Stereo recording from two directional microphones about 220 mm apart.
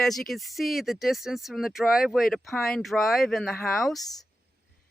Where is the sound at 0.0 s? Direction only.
Centre (ahead or behind).